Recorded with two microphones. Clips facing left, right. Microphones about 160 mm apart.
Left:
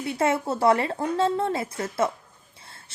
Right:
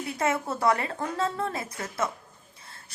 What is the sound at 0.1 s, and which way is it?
A woman's voice, 30° left (ahead or behind).